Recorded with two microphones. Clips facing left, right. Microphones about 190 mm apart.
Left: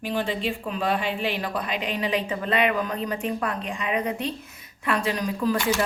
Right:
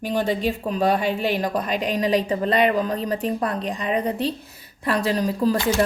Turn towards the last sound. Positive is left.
turn(degrees=-35)  # may be behind; listen again after turning